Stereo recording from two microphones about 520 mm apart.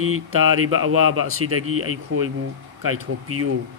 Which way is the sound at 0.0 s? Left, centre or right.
Right.